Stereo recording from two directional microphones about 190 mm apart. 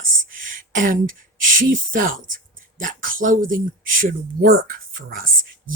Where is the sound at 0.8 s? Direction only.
45° right (ahead or behind).